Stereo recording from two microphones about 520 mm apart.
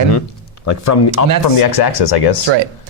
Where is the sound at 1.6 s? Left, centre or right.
Left.